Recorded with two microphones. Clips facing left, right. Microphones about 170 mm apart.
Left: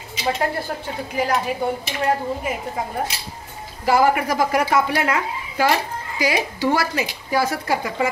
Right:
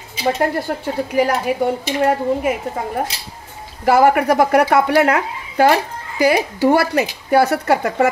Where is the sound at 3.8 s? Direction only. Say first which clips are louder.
Right 5 dB; 55° right (ahead or behind).